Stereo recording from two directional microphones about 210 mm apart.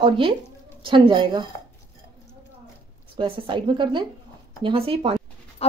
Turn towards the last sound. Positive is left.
turn(degrees=30)  # may be behind; listen again after turning